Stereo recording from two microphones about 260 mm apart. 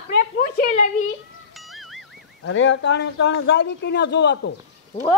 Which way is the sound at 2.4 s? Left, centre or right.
Left.